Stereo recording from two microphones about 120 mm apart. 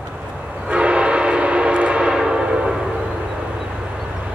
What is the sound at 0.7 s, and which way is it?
Train, 10° right (ahead or behind).